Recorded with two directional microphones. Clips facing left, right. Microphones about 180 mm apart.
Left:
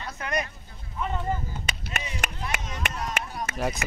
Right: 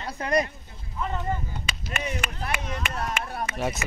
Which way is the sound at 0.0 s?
35° right (ahead or behind).